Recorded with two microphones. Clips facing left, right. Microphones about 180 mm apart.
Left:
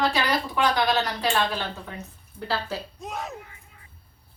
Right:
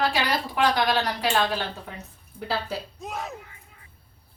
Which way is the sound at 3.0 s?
Centre (ahead or behind).